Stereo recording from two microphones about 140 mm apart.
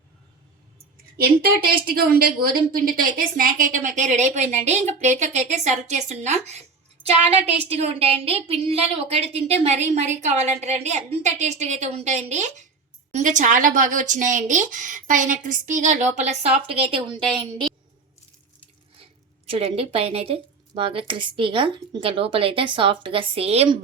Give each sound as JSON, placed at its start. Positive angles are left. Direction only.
{"t": 1.1, "sound": "a woman's voice", "side_deg": -90}
{"t": 19.5, "sound": "speech", "side_deg": -45}